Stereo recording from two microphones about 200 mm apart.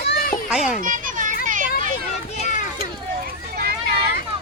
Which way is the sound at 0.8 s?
40° right (ahead or behind).